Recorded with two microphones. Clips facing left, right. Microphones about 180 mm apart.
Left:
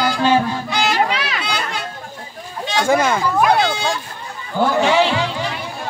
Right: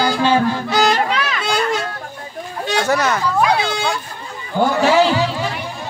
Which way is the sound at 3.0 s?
10° left (ahead or behind).